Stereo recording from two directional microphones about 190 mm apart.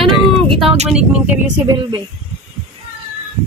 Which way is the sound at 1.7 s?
20° right (ahead or behind).